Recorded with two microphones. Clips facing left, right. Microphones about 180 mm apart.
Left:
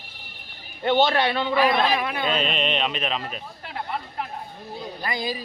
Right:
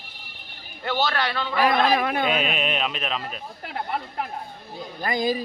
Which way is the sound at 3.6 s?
50° right (ahead or behind).